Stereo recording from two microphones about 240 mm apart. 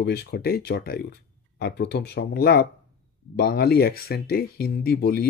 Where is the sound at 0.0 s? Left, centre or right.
Left.